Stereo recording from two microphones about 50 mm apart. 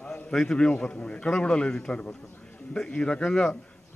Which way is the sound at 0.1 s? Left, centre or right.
Centre.